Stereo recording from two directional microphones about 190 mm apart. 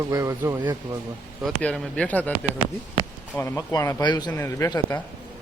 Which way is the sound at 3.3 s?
15° left (ahead or behind).